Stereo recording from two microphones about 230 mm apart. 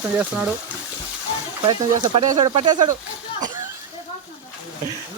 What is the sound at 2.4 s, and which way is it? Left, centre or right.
Speech, centre.